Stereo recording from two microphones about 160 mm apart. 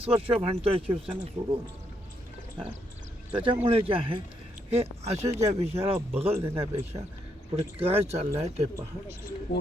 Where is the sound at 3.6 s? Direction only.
35° right (ahead or behind).